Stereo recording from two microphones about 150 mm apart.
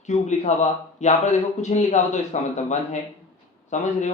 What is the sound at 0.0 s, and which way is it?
Speech, 50° left (ahead or behind).